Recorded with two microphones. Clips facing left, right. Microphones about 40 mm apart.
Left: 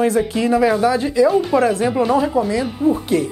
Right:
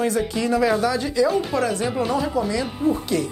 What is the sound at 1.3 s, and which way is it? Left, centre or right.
Speech, centre.